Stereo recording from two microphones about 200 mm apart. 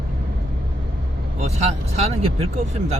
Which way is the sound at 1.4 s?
35° right (ahead or behind).